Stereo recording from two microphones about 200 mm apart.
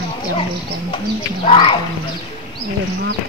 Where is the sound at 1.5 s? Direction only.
25° left (ahead or behind).